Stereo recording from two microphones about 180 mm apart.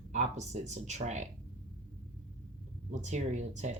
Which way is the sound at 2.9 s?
40° right (ahead or behind).